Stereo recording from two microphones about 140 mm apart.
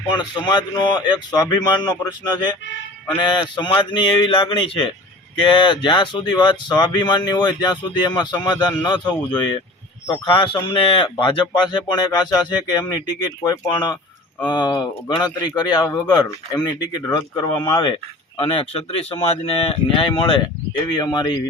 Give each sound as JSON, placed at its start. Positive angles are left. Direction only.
{"t": 0.1, "sound": "speech", "side_deg": 30}
{"t": 17.8, "sound": "speech", "side_deg": 40}